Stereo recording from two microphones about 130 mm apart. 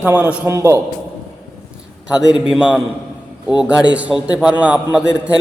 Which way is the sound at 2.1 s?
5° right (ahead or behind).